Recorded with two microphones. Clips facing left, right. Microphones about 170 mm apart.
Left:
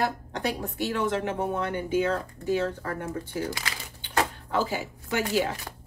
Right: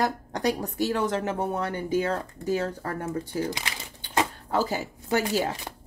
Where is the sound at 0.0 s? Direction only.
40° right (ahead or behind).